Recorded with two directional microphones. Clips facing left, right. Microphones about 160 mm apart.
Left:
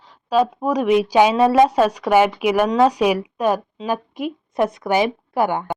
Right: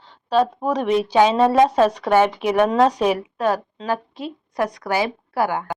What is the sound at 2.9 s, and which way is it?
A woman's voice, 10° left (ahead or behind).